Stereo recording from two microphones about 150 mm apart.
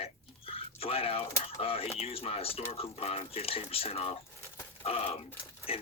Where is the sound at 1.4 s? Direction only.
40° left (ahead or behind).